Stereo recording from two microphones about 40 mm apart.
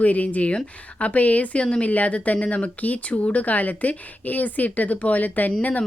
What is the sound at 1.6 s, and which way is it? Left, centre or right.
Speech, left.